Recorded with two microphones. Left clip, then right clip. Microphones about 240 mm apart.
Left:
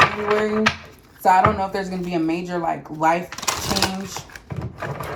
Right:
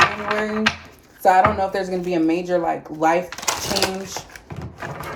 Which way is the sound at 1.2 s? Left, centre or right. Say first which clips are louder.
Right 1 dB; centre.